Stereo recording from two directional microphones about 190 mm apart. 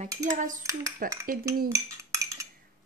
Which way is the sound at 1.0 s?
50° right (ahead or behind).